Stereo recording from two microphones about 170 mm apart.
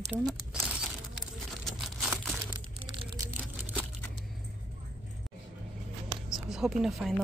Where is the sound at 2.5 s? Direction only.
25° right (ahead or behind).